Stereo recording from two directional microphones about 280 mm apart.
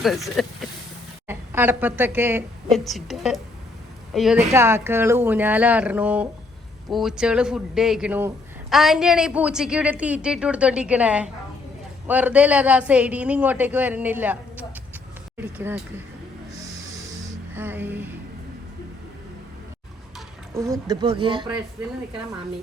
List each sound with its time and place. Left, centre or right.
0.0 s a woman's voice: centre
17.5 s music: centre
20.6 s speech: centre